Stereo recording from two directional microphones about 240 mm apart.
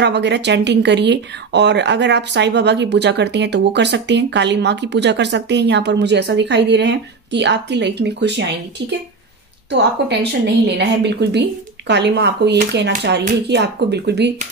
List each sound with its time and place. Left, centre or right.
0.0 s speech: right
9.7 s speech: right